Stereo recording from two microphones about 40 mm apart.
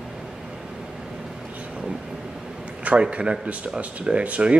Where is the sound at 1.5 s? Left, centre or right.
Right.